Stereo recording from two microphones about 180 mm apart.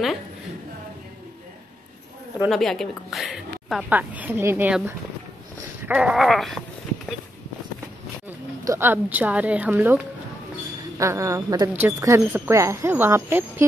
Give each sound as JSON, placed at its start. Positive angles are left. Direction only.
{"t": 2.4, "sound": "a woman's voice", "side_deg": 0}
{"t": 5.6, "sound": "a sound", "side_deg": -10}
{"t": 8.6, "sound": "speech", "side_deg": -15}
{"t": 11.0, "sound": "speech", "side_deg": -15}